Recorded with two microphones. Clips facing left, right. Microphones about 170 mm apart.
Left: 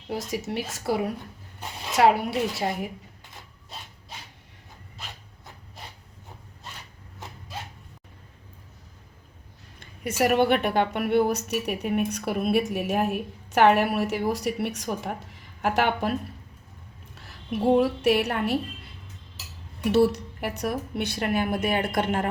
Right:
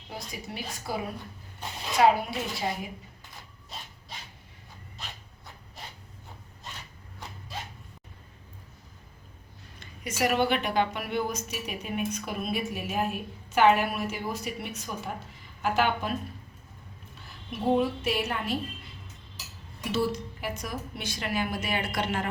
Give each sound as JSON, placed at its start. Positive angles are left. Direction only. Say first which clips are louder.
{"t": 0.1, "sound": "a woman's voice", "louder": "left 9 dB", "side_deg": 80}
{"t": 9.8, "sound": "speech", "louder": "left 4 dB", "side_deg": 55}
{"t": 17.7, "sound": "speech", "louder": "left 6 dB", "side_deg": 75}
{"t": 19.8, "sound": "a woman's voice", "louder": "left 8 dB", "side_deg": 70}